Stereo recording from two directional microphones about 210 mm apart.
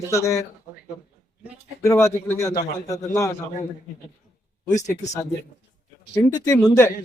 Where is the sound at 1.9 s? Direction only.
10° left (ahead or behind).